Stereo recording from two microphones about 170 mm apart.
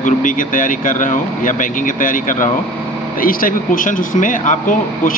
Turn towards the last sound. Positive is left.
turn(degrees=50)  # may be behind; listen again after turning